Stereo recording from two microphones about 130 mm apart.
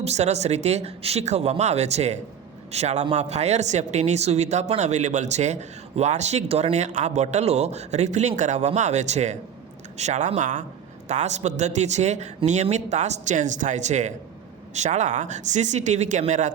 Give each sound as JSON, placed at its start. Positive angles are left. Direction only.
{"t": 0.0, "sound": "speech", "side_deg": -55}
{"t": 11.1, "sound": "speech", "side_deg": -60}